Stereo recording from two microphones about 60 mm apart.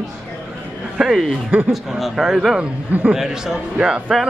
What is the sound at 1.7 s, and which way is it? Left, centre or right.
Speech, centre.